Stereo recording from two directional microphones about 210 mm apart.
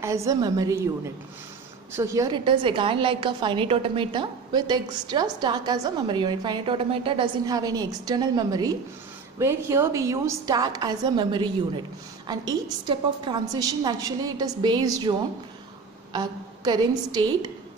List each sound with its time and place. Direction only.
0.0 s a woman's voice: 15° right (ahead or behind)